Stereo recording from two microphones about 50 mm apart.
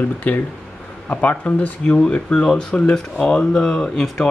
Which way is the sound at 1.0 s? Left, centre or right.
Left.